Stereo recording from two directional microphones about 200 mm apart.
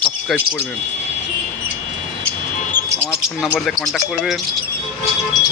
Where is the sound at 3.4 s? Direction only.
Centre (ahead or behind).